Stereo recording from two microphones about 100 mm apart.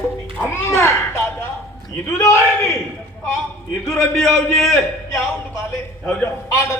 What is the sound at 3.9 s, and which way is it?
Speech, centre (ahead or behind).